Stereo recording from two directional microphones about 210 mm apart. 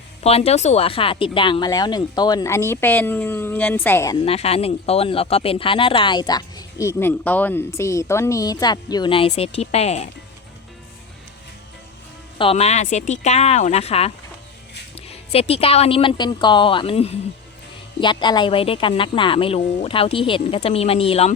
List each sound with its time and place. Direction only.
0.2 s speech: 30° left (ahead or behind); by 4.2 s 15° left (ahead or behind)
4.2 s speech: 30° left (ahead or behind)
12.4 s speech: 30° left (ahead or behind)